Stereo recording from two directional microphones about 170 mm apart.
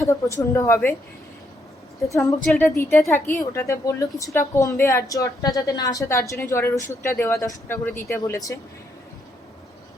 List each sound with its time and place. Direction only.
0.1 s a woman's voice: 20° left (ahead or behind)
2.0 s speech: 20° left (ahead or behind)
2.4 s a woman's voice: centre (ahead or behind)
2.6 s a woman's voice: 15° left (ahead or behind)